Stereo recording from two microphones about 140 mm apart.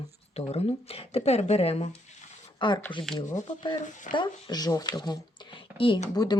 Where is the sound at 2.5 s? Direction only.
35° left (ahead or behind).